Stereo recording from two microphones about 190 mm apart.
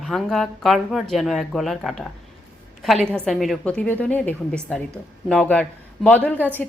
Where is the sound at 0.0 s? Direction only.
Centre (ahead or behind).